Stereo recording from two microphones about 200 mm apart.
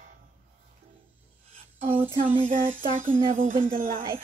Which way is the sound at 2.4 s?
40° right (ahead or behind).